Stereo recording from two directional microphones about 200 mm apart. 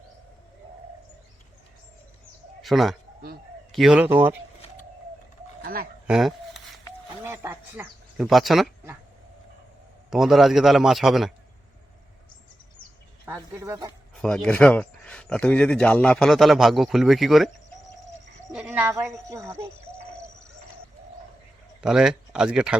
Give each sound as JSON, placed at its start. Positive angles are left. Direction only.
{"t": 2.6, "sound": "a man's voice", "side_deg": 0}
{"t": 5.6, "sound": "speech", "side_deg": -45}
{"t": 6.1, "sound": "a sound", "side_deg": 0}
{"t": 7.3, "sound": "a sound", "side_deg": -10}
{"t": 10.1, "sound": "speech", "side_deg": 0}
{"t": 13.2, "sound": "a man's voice", "side_deg": -10}
{"t": 14.2, "sound": "speech", "side_deg": 5}
{"t": 18.5, "sound": "a woman's voice", "side_deg": -5}
{"t": 21.8, "sound": "speech", "side_deg": -5}